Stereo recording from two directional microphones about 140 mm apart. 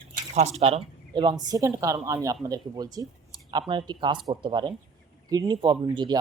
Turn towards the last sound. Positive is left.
turn(degrees=-35)  # may be behind; listen again after turning